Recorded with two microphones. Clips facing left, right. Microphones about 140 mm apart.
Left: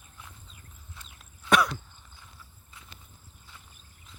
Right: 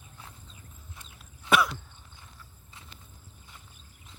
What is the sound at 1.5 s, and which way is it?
Throat clearing, centre (ahead or behind).